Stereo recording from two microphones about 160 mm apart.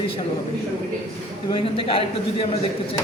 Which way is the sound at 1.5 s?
35° left (ahead or behind).